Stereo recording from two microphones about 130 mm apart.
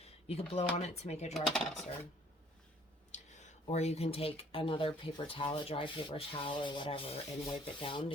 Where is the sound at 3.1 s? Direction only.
65° left (ahead or behind).